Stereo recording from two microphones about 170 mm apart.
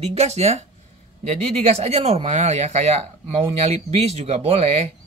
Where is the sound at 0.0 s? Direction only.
40° right (ahead or behind).